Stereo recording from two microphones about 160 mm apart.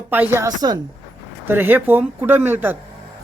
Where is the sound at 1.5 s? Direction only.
10° right (ahead or behind).